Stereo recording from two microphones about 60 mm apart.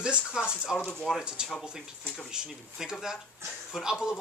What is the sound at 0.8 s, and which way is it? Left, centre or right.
Speech, centre.